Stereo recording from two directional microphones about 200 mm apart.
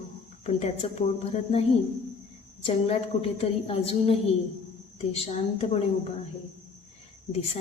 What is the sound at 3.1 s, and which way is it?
A woman's voice, 35° left (ahead or behind).